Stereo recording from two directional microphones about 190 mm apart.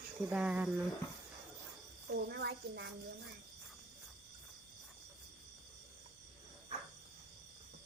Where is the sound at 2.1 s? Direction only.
60° right (ahead or behind).